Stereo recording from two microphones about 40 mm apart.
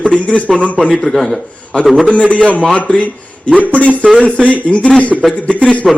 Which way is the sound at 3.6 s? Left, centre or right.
Left.